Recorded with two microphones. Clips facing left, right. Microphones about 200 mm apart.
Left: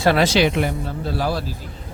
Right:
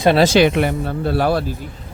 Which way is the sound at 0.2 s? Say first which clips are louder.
Right 4 dB; 50° right (ahead or behind).